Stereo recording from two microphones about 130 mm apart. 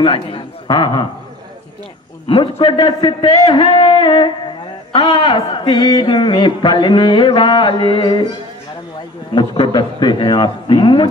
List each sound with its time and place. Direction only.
0.0 s a man's voice: 45° left (ahead or behind)
2.2 s a man's voice: 40° left (ahead or behind)
9.3 s a man's voice: 35° left (ahead or behind)